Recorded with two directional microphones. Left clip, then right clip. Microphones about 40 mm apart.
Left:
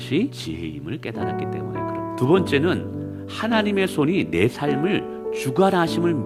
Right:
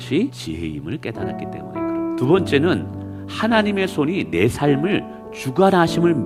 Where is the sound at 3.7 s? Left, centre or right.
Centre.